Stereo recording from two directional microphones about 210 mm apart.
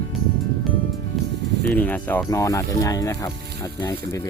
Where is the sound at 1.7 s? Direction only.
10° left (ahead or behind).